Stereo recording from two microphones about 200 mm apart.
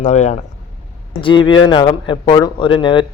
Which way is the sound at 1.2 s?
25° left (ahead or behind).